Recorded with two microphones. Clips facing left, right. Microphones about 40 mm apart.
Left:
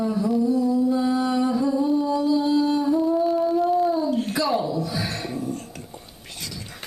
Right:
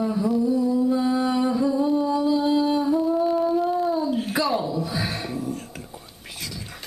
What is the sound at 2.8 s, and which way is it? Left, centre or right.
Humming, centre.